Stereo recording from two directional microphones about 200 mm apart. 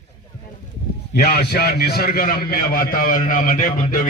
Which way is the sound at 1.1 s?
50° left (ahead or behind).